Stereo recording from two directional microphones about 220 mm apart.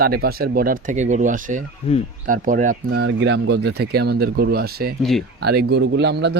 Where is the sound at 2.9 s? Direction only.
50° right (ahead or behind).